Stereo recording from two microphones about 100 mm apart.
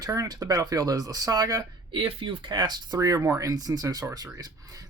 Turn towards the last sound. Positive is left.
turn(degrees=-40)  # may be behind; listen again after turning